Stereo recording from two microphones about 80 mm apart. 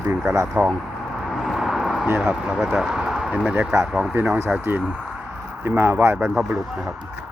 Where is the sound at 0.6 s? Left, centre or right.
Right.